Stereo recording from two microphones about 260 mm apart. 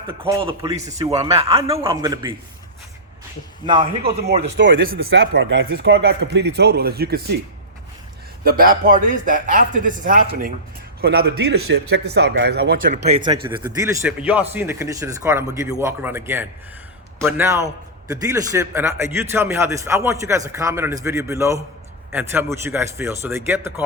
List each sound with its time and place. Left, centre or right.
0.1 s a man's voice: right
1.3 s a man's voice: right
3.7 s a man's voice: centre
4.1 s speech: right
8.4 s speech: right
12.9 s a man's voice: right